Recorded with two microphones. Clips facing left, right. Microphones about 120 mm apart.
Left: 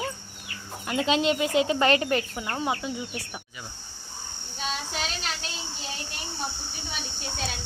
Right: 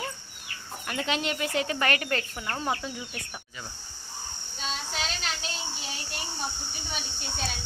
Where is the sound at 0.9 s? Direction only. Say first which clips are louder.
Left 6 dB; 20° left (ahead or behind).